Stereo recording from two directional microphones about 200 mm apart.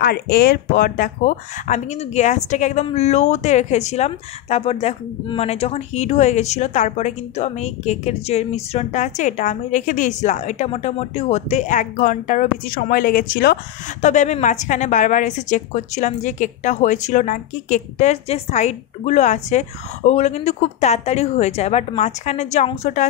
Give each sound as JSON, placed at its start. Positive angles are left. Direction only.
{"t": 0.0, "sound": "speech", "side_deg": 50}